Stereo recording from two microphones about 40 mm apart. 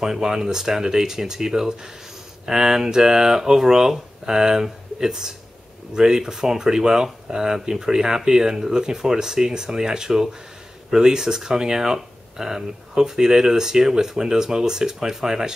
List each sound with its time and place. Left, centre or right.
0.0 s speech: centre